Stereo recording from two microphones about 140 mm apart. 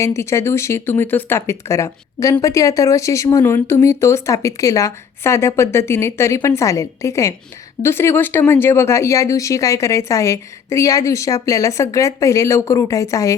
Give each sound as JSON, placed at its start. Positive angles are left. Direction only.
{"t": 0.0, "sound": "speech", "side_deg": 20}